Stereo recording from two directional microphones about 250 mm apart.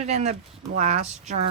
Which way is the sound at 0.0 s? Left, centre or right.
Right.